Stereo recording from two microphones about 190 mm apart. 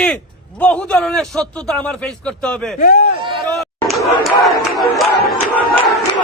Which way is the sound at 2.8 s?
45° left (ahead or behind).